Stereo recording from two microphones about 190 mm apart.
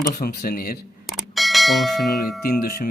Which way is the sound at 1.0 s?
Centre (ahead or behind).